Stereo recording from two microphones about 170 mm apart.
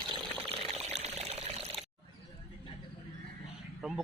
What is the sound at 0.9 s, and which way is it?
Pour, 40° right (ahead or behind).